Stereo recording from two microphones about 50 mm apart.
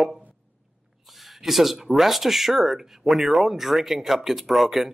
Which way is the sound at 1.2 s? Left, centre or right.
Centre.